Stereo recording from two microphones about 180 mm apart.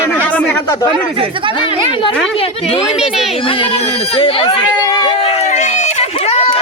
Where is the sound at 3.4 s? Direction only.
30° left (ahead or behind).